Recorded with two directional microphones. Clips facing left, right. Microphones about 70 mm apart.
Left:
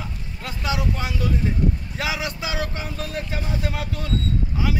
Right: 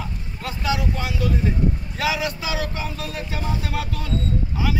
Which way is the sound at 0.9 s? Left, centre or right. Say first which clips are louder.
Right 1 dB; left.